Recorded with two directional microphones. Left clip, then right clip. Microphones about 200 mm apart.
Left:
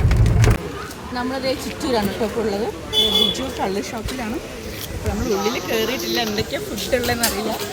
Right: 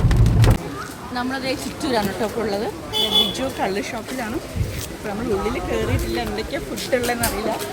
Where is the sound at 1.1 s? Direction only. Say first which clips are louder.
Left 2 dB; centre (ahead or behind).